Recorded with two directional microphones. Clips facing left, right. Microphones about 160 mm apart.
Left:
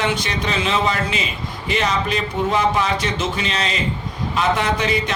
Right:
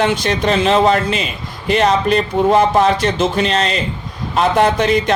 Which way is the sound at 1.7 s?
55° right (ahead or behind).